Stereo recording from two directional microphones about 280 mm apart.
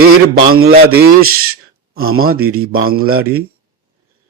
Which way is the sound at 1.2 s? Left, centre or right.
Right.